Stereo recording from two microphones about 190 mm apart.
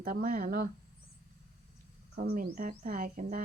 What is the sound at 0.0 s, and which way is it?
Speech, 45° right (ahead or behind).